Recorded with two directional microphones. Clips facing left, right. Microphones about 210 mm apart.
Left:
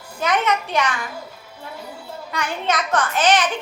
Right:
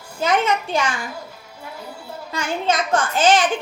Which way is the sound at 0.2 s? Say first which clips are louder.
Right 1 dB; 25° right (ahead or behind).